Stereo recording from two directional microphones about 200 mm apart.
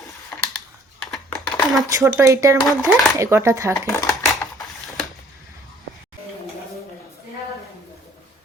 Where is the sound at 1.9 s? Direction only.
15° right (ahead or behind).